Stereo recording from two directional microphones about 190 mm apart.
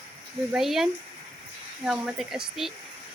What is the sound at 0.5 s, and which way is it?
Speech, centre (ahead or behind).